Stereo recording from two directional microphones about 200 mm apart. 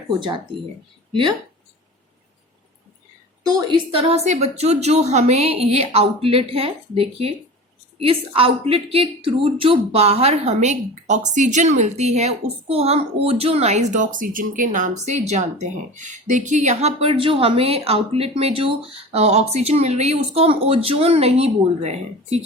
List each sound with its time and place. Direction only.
3.4 s a woman's voice: 20° right (ahead or behind)